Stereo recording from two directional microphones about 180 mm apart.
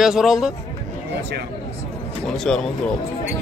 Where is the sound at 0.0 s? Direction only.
5° right (ahead or behind).